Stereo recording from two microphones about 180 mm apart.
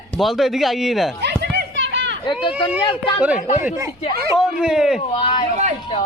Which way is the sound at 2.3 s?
30° left (ahead or behind).